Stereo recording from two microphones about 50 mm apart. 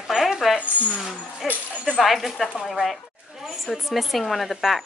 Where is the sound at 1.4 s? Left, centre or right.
Centre.